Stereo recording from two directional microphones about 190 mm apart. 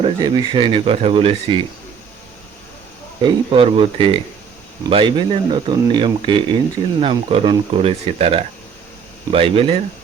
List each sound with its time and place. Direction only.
0.0 s speech: 20° right (ahead or behind)
3.2 s speech: 25° right (ahead or behind)